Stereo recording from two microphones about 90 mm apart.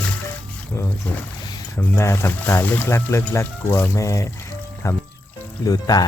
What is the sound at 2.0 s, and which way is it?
Speech, 30° left (ahead or behind).